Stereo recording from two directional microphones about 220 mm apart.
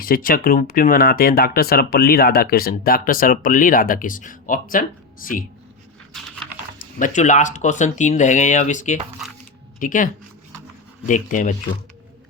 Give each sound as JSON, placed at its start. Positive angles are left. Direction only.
{"t": 0.0, "sound": "speech", "side_deg": 40}
{"t": 6.1, "sound": "typing", "side_deg": 0}
{"t": 7.0, "sound": "speech", "side_deg": 35}